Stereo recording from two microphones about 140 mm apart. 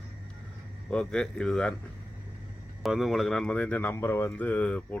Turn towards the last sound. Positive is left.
turn(degrees=10)  # may be behind; listen again after turning